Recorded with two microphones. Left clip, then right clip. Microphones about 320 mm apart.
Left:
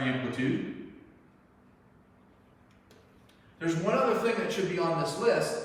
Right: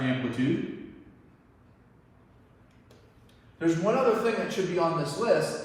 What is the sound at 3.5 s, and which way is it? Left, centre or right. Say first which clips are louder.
A man's voice: right 3 dB; centre.